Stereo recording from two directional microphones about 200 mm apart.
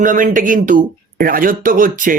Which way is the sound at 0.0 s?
40° right (ahead or behind).